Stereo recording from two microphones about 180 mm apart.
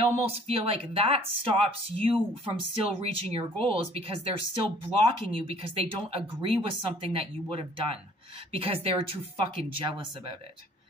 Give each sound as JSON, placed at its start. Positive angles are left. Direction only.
{"t": 0.0, "sound": "speech", "side_deg": -35}